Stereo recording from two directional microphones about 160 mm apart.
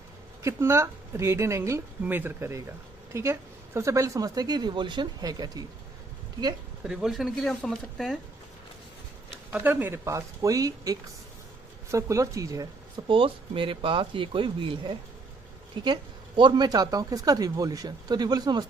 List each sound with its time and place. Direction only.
0.4 s speech: 15° right (ahead or behind)
6.8 s speech: 5° right (ahead or behind)
9.5 s speech: 10° right (ahead or behind)
13.1 s speech: 35° right (ahead or behind)